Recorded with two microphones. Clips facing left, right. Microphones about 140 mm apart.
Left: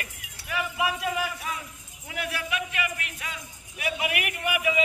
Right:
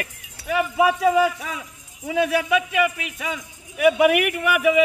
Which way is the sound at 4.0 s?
60° right (ahead or behind).